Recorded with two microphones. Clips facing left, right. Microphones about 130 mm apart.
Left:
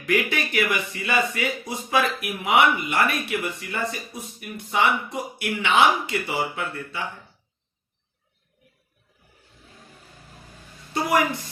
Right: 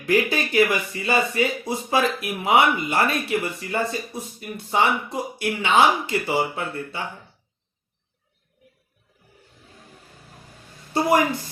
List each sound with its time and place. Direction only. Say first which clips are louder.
0.1 s speech: right 3 dB; 25° right (ahead or behind)
10.9 s speech: right 3 dB; 25° right (ahead or behind)